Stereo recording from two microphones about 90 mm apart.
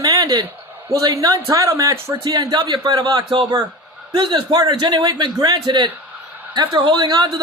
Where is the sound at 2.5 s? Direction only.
50° right (ahead or behind).